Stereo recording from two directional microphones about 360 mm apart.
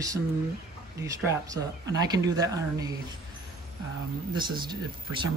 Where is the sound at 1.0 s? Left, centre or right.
Centre.